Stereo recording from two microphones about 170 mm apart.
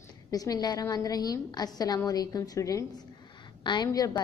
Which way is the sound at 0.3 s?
20° left (ahead or behind).